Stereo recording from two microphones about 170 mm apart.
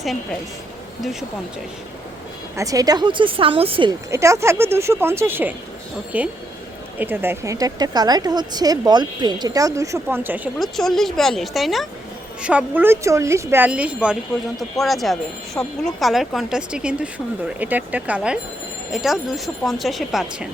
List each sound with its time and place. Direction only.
0.0 s speech: centre (ahead or behind)
2.6 s speech: 20° right (ahead or behind)
4.1 s speech: 15° right (ahead or behind)
10.6 s speech: centre (ahead or behind)